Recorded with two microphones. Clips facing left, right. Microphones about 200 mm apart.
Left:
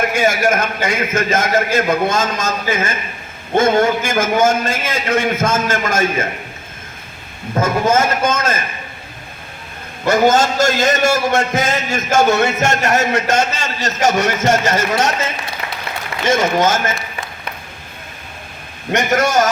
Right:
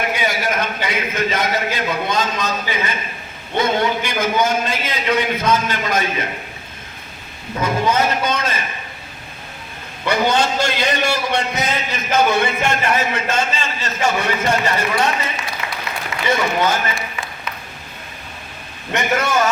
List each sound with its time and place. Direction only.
0.1 s a man's voice: 45° left (ahead or behind)
7.5 s a man's voice: 45° left (ahead or behind)
10.1 s a man's voice: 45° left (ahead or behind)
13.0 s a man's voice: 80° left
14.0 s a man's voice: 40° left (ahead or behind)
16.4 s a man's voice: 45° left (ahead or behind)
18.9 s a man's voice: 40° left (ahead or behind)